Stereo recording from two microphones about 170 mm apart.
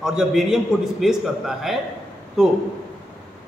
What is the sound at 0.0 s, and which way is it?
A man's voice, 5° right (ahead or behind).